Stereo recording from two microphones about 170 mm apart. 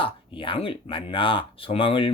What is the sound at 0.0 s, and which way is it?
Speech, 30° left (ahead or behind).